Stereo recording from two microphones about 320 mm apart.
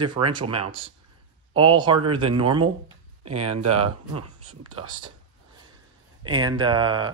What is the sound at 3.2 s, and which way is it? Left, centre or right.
Speech, right.